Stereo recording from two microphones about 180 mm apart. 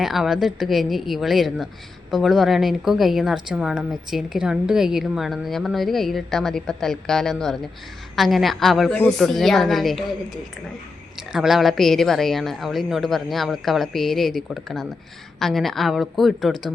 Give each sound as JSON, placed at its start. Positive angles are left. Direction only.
{"t": 0.0, "sound": "a woman's voice", "side_deg": 0}
{"t": 11.2, "sound": "a woman's voice", "side_deg": 0}